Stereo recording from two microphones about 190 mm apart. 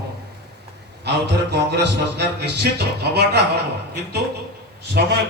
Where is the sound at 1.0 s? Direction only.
60° right (ahead or behind).